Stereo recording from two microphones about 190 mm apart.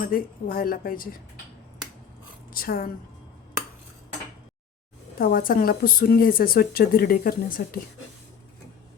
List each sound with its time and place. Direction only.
0.0 s speech: 50° left (ahead or behind)
2.5 s a woman's voice: 50° left (ahead or behind)
5.2 s speech: 45° left (ahead or behind)